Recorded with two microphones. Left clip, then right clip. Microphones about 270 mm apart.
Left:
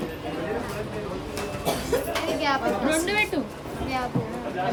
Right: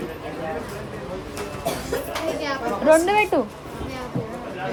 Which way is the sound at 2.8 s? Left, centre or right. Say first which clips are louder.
Right 12 dB; right.